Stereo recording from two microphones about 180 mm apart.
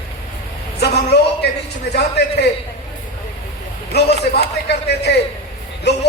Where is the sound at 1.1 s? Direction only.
65° left (ahead or behind).